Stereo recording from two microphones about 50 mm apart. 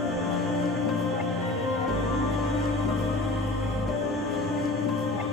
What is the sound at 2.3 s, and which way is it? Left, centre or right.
Music, centre.